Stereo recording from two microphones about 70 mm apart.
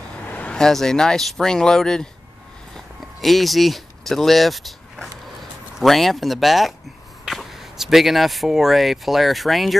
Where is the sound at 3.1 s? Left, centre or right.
Centre.